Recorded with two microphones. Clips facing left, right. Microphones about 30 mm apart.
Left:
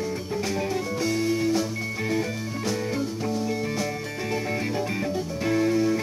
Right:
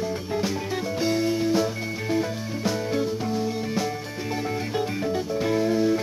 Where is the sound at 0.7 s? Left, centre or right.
Right.